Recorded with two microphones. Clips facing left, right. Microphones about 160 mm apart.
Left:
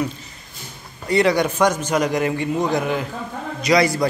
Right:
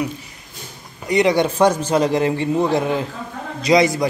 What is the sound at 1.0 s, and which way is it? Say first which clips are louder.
A man's voice: right 1 dB; 20° right (ahead or behind).